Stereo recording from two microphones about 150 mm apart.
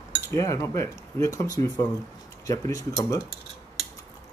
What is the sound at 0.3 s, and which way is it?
Speech, 20° left (ahead or behind).